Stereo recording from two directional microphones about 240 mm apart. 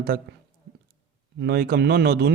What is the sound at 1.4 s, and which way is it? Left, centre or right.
Speech, right.